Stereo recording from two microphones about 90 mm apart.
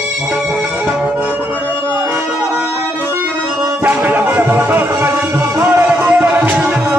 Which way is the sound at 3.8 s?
20° right (ahead or behind).